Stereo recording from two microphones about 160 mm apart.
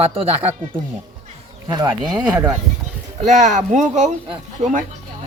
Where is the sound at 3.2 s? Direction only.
50° right (ahead or behind).